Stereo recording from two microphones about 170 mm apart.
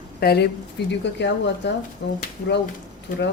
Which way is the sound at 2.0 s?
75° left (ahead or behind).